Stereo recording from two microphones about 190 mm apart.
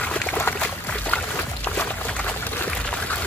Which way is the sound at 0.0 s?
5° left (ahead or behind).